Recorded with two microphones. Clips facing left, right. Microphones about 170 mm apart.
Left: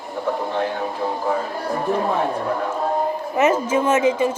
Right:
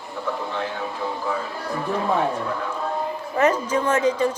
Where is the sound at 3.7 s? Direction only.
15° left (ahead or behind).